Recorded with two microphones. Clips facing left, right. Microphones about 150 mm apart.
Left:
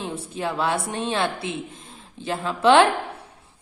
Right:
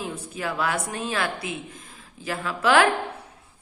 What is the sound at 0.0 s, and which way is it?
Speech, 25° left (ahead or behind).